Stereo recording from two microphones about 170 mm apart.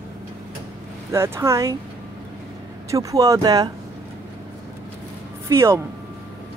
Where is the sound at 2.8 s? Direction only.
20° right (ahead or behind).